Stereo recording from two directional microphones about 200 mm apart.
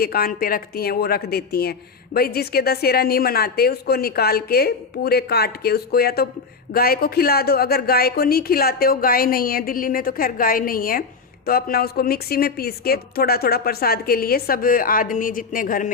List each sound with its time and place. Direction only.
0.0 s a woman's voice: 50° left (ahead or behind)